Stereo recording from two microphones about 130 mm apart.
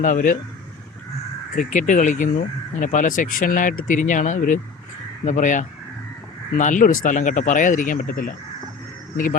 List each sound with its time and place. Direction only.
0.0 s speech: 90° left
1.5 s a man's voice: 80° left